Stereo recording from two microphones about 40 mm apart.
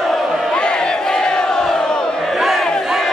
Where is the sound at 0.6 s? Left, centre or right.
Left.